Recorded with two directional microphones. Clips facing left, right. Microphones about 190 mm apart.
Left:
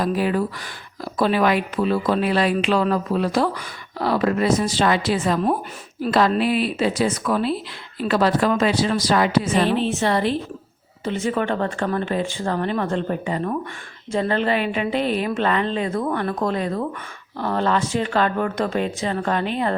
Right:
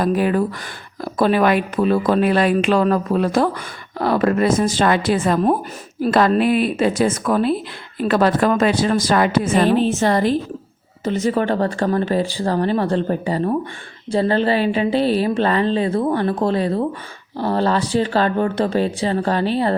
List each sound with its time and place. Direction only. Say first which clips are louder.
0.0 s a woman's voice: right 3 dB; 50° right (ahead or behind); by 19.7 s 35° right (ahead or behind)